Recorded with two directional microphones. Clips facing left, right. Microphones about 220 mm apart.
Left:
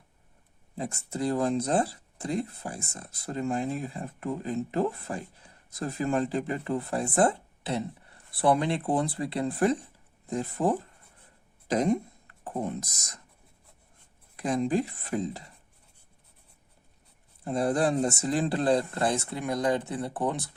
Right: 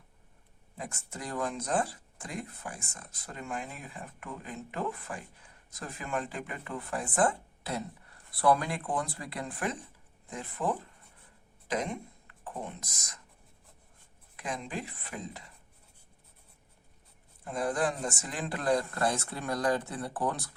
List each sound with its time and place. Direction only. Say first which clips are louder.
0.8 s speech: left 10 dB; 35° left (ahead or behind)
14.3 s speech: left 11 dB; 40° left (ahead or behind)
17.4 s speech: left 5 dB; 30° left (ahead or behind)